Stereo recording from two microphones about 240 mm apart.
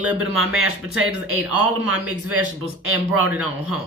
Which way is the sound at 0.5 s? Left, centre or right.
Right.